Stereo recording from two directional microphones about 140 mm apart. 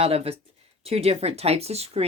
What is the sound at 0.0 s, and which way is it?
Speech, 45° right (ahead or behind).